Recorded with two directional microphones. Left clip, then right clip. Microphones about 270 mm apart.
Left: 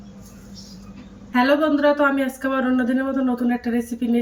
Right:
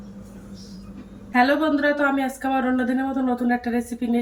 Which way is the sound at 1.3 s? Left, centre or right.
Centre.